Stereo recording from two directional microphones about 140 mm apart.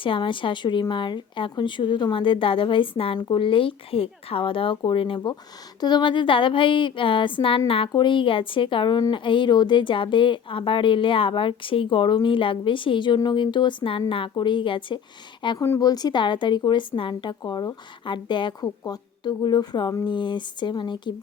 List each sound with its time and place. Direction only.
0.0 s speech: 35° left (ahead or behind)
15.6 s speech: 25° left (ahead or behind)